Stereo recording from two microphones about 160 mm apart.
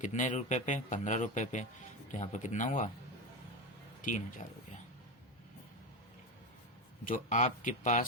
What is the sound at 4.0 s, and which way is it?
Speech, 55° left (ahead or behind).